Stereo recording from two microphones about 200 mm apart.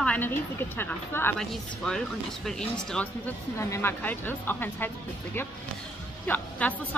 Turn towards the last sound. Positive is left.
turn(degrees=5)  # may be behind; listen again after turning